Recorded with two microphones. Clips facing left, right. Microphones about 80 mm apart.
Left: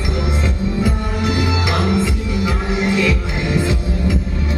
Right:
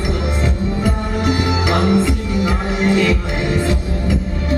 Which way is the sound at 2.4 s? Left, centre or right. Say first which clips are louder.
Right 1 dB; right.